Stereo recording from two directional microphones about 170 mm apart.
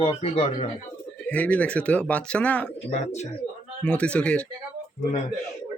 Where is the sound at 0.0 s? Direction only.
35° left (ahead or behind).